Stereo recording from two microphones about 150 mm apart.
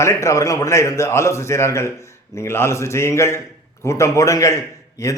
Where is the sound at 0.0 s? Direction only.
20° left (ahead or behind).